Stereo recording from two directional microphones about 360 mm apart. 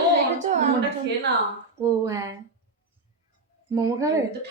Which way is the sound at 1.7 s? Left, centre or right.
Centre.